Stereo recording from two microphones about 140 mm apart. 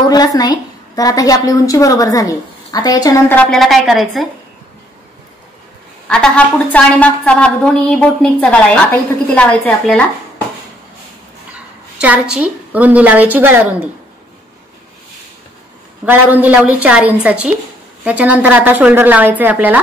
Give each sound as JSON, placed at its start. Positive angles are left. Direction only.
{"t": 0.1, "sound": "a woman's voice", "side_deg": 30}
{"t": 3.3, "sound": "a woman's voice", "side_deg": 10}
{"t": 6.0, "sound": "a woman's voice", "side_deg": 5}
{"t": 12.0, "sound": "a woman's voice", "side_deg": -10}
{"t": 16.1, "sound": "a woman's voice", "side_deg": -10}